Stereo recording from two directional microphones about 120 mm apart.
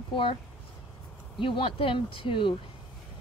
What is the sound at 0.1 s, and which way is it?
Speech, 45° left (ahead or behind).